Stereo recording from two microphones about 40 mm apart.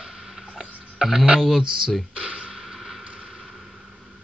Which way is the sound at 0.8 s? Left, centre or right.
Centre.